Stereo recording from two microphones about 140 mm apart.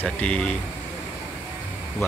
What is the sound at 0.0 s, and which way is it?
Speech, 10° left (ahead or behind).